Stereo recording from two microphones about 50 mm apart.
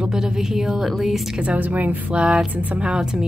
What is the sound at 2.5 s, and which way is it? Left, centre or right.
Speech, right.